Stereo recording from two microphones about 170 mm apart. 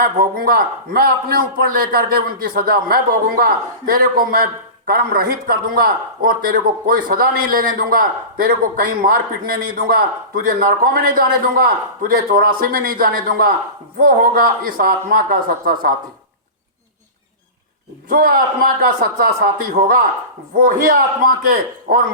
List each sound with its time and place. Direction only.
0.0 s a man's voice: 60° right (ahead or behind)
18.1 s a man's voice: 55° right (ahead or behind)
20.6 s a man's voice: 55° right (ahead or behind)